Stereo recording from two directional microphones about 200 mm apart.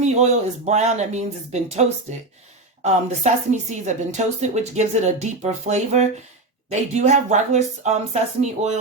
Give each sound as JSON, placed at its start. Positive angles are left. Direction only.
{"t": 0.0, "sound": "speech", "side_deg": -35}